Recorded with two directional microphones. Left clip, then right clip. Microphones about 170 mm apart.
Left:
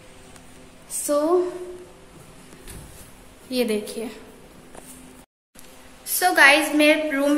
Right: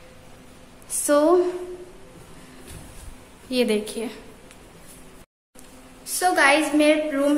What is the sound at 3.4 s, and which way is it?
Speech, 10° right (ahead or behind).